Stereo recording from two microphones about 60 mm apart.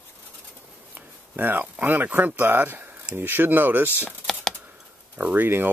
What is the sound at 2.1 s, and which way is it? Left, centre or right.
Speech, right.